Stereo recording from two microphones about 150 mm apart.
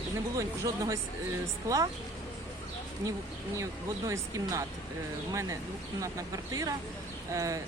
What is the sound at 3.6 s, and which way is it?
Speech, 20° right (ahead or behind).